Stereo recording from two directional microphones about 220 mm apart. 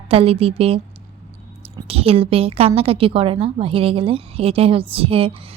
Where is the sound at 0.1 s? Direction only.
25° right (ahead or behind).